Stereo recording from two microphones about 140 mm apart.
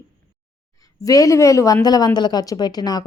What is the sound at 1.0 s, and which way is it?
Speech, 25° left (ahead or behind).